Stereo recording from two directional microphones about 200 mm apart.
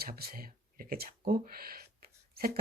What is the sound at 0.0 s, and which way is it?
Speech, 50° right (ahead or behind).